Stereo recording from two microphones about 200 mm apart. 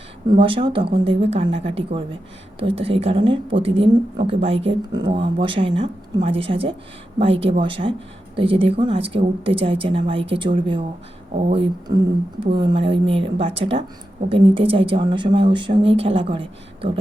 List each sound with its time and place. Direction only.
0.3 s speech: 25° right (ahead or behind)